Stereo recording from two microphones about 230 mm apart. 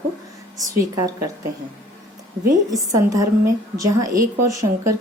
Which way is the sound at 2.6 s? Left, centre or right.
Centre.